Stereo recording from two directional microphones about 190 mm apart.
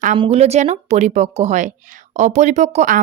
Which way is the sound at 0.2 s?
35° right (ahead or behind).